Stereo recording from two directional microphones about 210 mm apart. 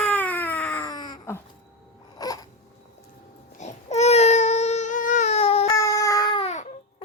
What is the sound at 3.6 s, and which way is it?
Baby cry, 35° left (ahead or behind).